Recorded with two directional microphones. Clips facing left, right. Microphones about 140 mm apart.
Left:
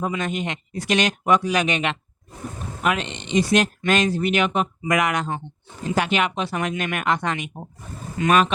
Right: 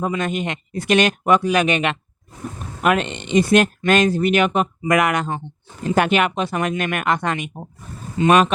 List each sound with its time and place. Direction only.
0.2 s speech: 55° right (ahead or behind)
8.2 s speech: 25° right (ahead or behind)